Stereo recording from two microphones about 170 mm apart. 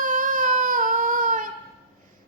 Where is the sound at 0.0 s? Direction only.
55° right (ahead or behind).